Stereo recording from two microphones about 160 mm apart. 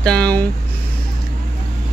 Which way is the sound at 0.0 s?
5° left (ahead or behind).